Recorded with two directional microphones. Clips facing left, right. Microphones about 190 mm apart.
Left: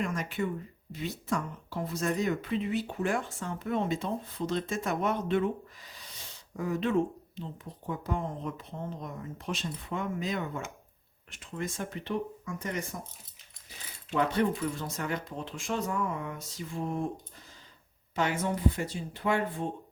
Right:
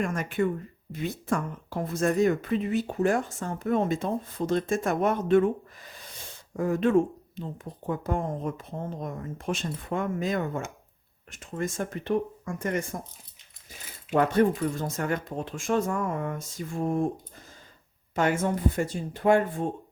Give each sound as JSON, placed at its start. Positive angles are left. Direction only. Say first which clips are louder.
{"t": 0.0, "sound": "speech", "louder": "right 5 dB", "side_deg": -50}
{"t": 14.1, "sound": "speech", "louder": "right 5 dB", "side_deg": -45}
{"t": 18.1, "sound": "speech", "louder": "right 5 dB", "side_deg": -50}